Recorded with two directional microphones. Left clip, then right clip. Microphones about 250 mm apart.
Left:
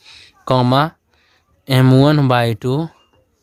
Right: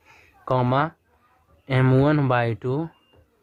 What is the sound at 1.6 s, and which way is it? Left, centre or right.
Speech, left.